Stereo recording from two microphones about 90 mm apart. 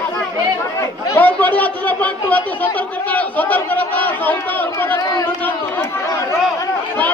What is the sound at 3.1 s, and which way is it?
Crowd, 20° left (ahead or behind).